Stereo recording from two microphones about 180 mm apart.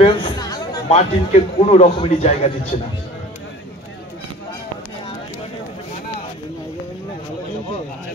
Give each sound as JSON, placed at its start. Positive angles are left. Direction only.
{"t": 0.0, "sound": "speech", "side_deg": 30}
{"t": 0.8, "sound": "a man's voice", "side_deg": 35}